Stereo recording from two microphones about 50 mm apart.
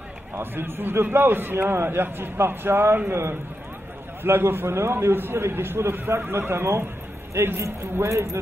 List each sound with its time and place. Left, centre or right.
0.4 s a man's voice: right